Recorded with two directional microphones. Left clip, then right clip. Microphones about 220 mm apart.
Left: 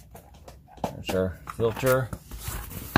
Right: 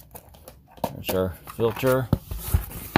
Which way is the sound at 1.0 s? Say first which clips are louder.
Right 1 dB; 20° right (ahead or behind).